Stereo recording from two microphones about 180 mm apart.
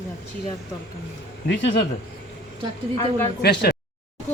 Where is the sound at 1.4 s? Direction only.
75° left (ahead or behind).